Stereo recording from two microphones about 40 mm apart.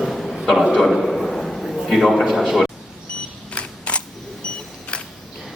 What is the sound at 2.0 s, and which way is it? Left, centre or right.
Speech, centre.